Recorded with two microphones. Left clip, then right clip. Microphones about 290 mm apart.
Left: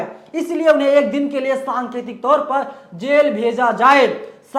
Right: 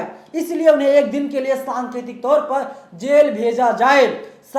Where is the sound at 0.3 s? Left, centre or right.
Centre.